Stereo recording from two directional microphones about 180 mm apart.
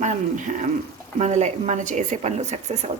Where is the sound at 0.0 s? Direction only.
40° right (ahead or behind).